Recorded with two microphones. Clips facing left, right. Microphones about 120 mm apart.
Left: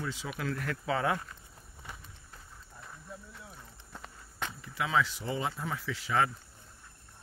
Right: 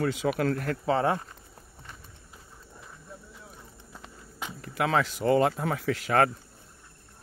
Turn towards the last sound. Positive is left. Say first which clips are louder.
# right 6 dB
turn(degrees=-60)  # may be behind; listen again after turning